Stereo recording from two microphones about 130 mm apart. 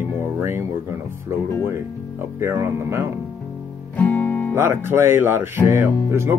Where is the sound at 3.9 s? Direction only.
15° left (ahead or behind).